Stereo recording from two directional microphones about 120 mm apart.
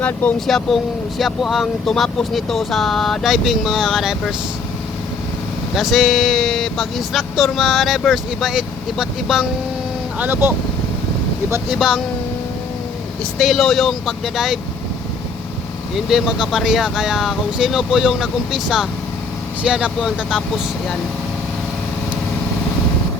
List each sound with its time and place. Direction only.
0.0 s speech: 15° left (ahead or behind)
0.3 s speech: centre (ahead or behind)
5.7 s speech: centre (ahead or behind)
10.2 s speech: 15° right (ahead or behind)
11.7 s speech: 5° right (ahead or behind)
13.4 s speech: centre (ahead or behind)
16.0 s speech: 5° right (ahead or behind)